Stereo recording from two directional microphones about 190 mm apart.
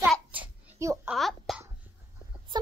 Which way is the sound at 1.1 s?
Centre (ahead or behind).